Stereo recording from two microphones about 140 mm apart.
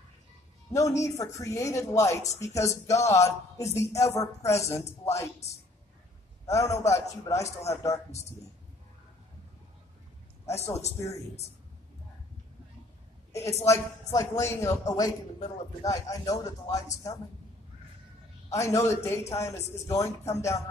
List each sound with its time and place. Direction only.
0.7 s speech: 20° left (ahead or behind)
6.4 s a man's voice: 20° left (ahead or behind)
10.4 s a man's voice: 50° left (ahead or behind)
13.3 s a woman's voice: 20° left (ahead or behind)
18.5 s speech: 20° left (ahead or behind)